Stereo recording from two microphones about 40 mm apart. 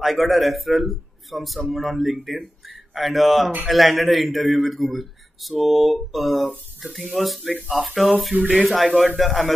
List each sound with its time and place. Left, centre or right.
0.0 s a man's voice: centre
8.3 s speech: right
8.6 s a man's voice: centre